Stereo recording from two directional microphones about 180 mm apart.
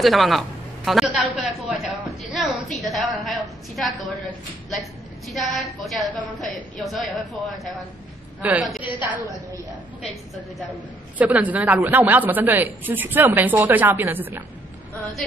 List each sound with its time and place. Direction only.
0.0 s a man's voice: centre (ahead or behind)
5.3 s a man's voice: centre (ahead or behind)
11.1 s a woman's voice: 10° right (ahead or behind)